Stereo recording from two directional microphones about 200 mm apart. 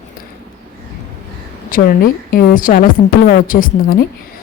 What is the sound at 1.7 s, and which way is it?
A woman's voice, 45° left (ahead or behind).